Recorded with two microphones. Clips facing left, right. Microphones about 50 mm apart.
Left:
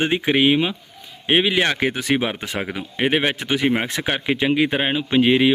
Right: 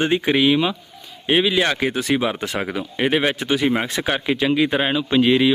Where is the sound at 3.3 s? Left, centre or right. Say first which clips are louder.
Right 1 dB; left.